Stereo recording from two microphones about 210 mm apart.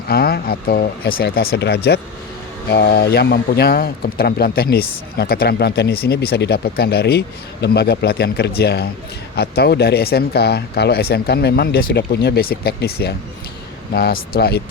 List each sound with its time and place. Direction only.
0.1 s a man's voice: 45° left (ahead or behind)